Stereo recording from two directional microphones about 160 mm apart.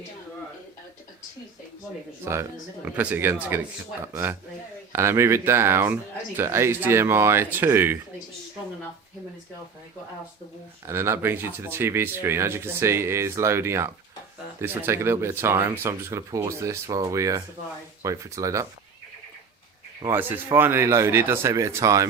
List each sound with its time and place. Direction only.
2.2 s speech: 15° right (ahead or behind)
10.8 s speech: 15° right (ahead or behind)
20.1 s speech: 10° right (ahead or behind)